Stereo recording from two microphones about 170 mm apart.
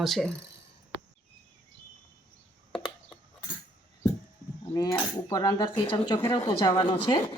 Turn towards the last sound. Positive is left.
turn(degrees=25)  # may be behind; listen again after turning